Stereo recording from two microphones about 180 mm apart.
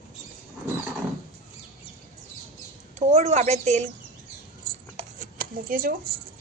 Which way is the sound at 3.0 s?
40° right (ahead or behind).